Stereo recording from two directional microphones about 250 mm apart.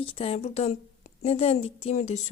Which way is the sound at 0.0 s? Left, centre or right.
Left.